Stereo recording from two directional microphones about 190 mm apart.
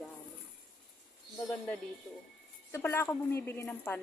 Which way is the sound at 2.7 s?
15° left (ahead or behind).